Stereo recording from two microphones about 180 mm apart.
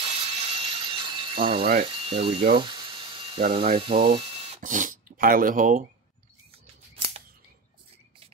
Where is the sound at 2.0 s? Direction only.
30° right (ahead or behind).